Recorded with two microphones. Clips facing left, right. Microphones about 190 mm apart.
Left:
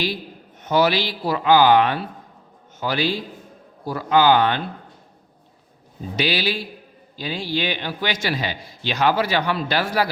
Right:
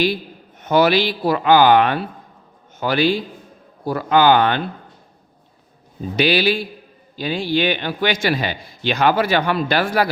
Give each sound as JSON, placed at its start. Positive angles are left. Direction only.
{"t": 0.6, "sound": "a man's voice", "side_deg": -60}
{"t": 6.1, "sound": "a man's voice", "side_deg": -55}